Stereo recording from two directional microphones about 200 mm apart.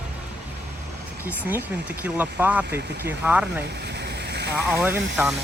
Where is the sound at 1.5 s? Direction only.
10° right (ahead or behind).